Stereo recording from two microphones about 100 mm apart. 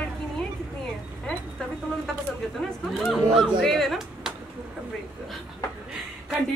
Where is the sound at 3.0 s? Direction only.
Centre (ahead or behind).